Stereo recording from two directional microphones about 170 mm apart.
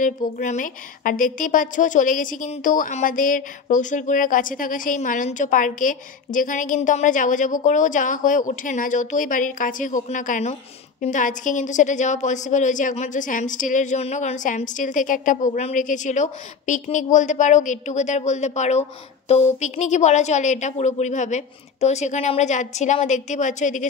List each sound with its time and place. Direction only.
0.0 s a woman's voice: 50° left (ahead or behind)